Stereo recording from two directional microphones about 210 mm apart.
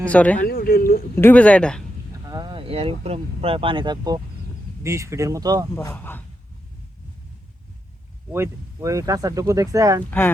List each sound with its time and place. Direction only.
0.0 s speech: 5° left (ahead or behind)
0.3 s speech: 45° left (ahead or behind)
1.1 s speech: 10° left (ahead or behind)
2.2 s speech: 20° right (ahead or behind)
5.7 s speech: 10° left (ahead or behind)
8.3 s speech: 15° right (ahead or behind)
10.1 s speech: 10° left (ahead or behind)